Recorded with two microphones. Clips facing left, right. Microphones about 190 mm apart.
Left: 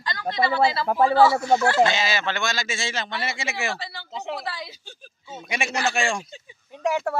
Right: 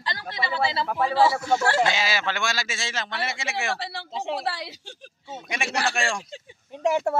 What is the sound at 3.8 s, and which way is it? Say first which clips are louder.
Speech: right 3 dB; 70° right (ahead or behind).